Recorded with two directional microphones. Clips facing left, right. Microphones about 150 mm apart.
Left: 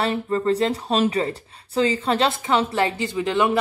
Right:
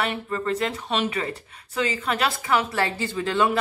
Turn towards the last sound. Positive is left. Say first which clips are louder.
# left 2 dB
turn(degrees=15)  # may be behind; listen again after turning